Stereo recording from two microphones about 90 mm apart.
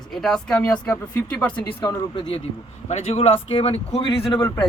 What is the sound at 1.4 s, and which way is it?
Speech, 20° left (ahead or behind).